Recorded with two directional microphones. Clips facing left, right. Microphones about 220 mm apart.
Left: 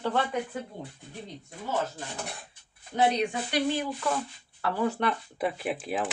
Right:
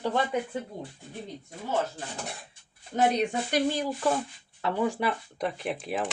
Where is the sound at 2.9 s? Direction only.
45° right (ahead or behind).